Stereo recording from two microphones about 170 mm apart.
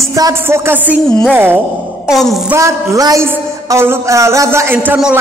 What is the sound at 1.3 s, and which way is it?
Speech, 10° right (ahead or behind).